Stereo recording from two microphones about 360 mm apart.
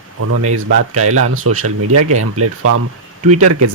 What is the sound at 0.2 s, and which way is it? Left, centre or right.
Speech, right.